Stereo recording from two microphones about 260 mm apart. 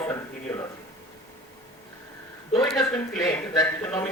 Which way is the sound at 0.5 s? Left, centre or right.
Centre.